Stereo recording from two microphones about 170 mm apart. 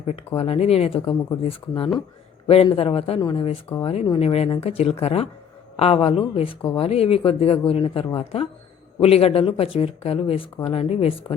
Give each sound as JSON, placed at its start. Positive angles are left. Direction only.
{"t": 0.3, "sound": "speech", "side_deg": 35}
{"t": 3.2, "sound": "speech", "side_deg": 25}